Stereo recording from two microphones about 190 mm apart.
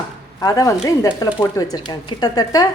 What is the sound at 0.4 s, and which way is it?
A woman's voice, 20° left (ahead or behind).